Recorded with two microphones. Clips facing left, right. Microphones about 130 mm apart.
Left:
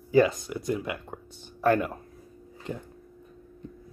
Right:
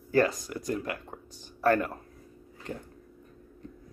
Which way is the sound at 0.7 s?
15° left (ahead or behind).